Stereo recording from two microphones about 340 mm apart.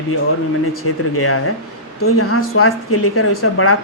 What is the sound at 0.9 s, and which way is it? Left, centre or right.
Speech, left.